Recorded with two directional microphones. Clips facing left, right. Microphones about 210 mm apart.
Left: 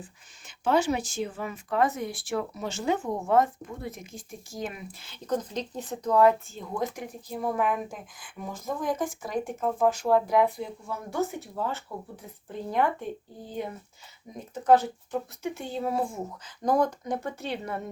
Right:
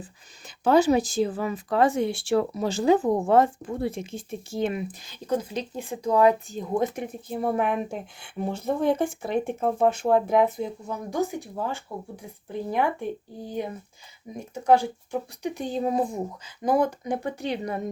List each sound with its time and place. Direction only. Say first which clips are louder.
0.0 s speech: right 3 dB; 35° right (ahead or behind); by 17.8 s 15° right (ahead or behind)